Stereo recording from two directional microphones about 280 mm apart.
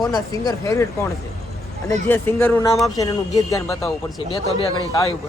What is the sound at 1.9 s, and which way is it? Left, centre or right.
Speech, centre.